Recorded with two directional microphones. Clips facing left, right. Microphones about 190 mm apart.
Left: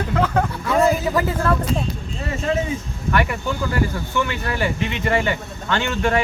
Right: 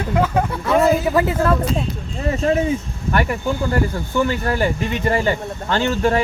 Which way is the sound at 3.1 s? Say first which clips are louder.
Right 2 dB; 35° right (ahead or behind).